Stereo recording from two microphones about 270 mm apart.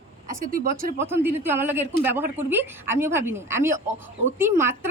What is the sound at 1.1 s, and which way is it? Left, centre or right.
A woman's voice, centre.